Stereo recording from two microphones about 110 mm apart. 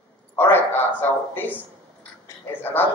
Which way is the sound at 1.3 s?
20° left (ahead or behind).